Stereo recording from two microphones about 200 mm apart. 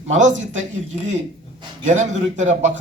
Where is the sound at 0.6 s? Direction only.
35° right (ahead or behind).